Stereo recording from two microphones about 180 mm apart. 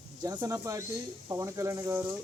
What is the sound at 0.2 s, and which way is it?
Speech, 20° right (ahead or behind).